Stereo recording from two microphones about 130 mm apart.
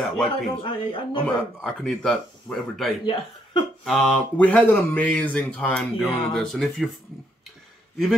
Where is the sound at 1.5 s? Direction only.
5° left (ahead or behind).